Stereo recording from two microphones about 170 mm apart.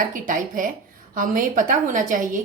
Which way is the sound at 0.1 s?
50° right (ahead or behind).